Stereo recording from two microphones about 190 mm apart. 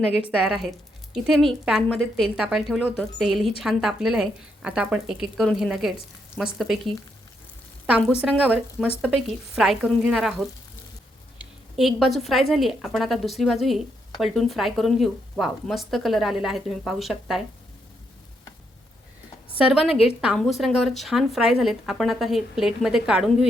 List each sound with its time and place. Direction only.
0.3 s speech: centre (ahead or behind)
7.9 s a woman's voice: 5° right (ahead or behind)
19.5 s speech: 5° right (ahead or behind)